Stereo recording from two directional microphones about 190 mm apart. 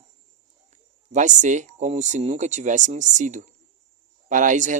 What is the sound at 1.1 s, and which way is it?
Speech, 40° right (ahead or behind).